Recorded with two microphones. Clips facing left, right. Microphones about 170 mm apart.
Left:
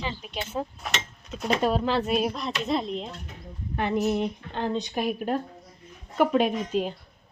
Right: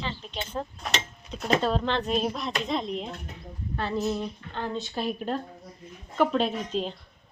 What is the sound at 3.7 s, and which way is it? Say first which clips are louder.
Speech: left 3 dB; 15° left (ahead or behind).